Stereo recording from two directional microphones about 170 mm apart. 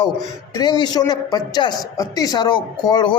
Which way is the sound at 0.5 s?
25° left (ahead or behind).